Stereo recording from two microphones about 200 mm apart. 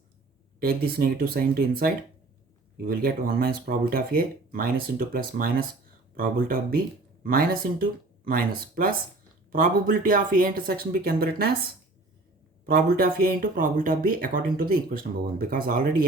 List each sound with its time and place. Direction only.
0.6 s speech: 50° right (ahead or behind)
12.6 s speech: 45° right (ahead or behind)